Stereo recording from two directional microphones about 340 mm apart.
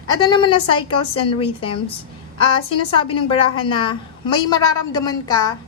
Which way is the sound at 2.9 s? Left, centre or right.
Centre.